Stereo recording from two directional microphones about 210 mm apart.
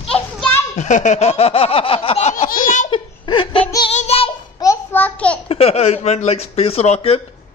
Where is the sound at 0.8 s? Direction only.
35° left (ahead or behind).